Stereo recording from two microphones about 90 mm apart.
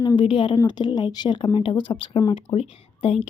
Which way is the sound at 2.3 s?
90° left.